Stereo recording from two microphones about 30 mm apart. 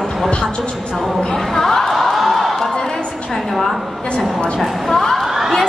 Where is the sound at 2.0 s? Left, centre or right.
Centre.